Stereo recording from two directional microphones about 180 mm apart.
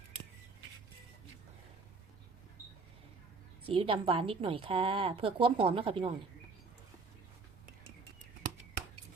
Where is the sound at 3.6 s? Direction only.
30° right (ahead or behind).